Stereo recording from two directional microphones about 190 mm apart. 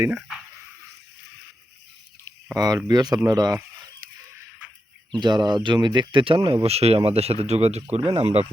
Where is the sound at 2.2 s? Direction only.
20° right (ahead or behind).